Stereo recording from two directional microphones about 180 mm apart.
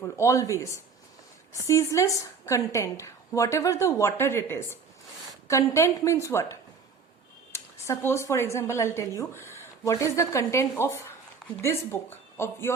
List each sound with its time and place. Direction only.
0.0 s a woman's voice: 15° left (ahead or behind)